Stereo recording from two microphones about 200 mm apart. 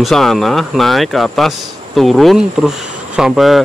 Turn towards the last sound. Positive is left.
turn(degrees=0)  # may be behind; listen again after turning